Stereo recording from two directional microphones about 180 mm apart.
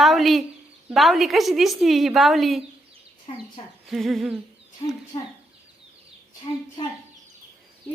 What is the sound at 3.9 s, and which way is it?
Speech, centre (ahead or behind).